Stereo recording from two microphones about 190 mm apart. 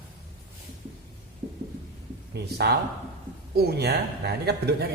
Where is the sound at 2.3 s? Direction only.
60° right (ahead or behind).